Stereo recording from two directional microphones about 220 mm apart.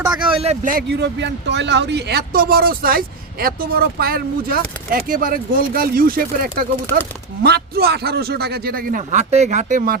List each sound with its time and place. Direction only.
0.3 s speech: 25° right (ahead or behind)